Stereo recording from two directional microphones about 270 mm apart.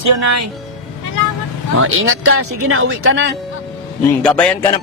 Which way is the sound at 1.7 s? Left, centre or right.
Right.